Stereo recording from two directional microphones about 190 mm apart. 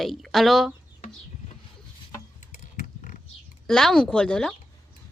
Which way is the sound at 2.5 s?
40° left (ahead or behind).